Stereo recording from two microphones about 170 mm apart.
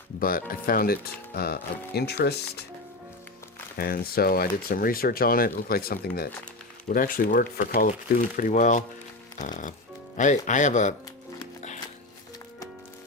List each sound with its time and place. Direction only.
0.2 s speech: 55° left (ahead or behind); by 2.4 s 70° left (ahead or behind)
3.8 s speech: 60° left (ahead or behind)